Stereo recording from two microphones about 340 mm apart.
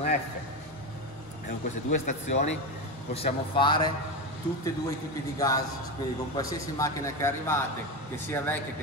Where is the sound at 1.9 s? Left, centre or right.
Left.